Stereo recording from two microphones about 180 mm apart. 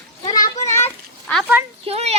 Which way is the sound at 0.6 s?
15° left (ahead or behind).